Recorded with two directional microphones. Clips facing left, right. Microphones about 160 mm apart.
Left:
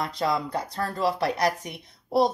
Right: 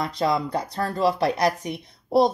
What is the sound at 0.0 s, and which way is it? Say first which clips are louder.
A woman's voice: right 3 dB; 20° right (ahead or behind).